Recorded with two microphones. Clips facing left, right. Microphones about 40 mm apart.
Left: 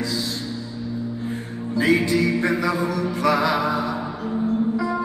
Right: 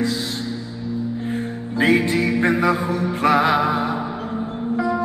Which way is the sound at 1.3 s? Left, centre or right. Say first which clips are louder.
Right 2 dB; right.